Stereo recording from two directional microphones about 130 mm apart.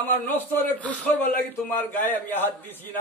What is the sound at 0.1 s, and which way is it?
A man's voice, 15° left (ahead or behind).